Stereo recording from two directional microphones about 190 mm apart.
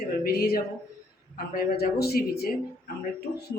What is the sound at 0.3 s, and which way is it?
Speech, 55° left (ahead or behind).